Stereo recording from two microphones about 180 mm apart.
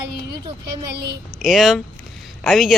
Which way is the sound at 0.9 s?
60° right (ahead or behind).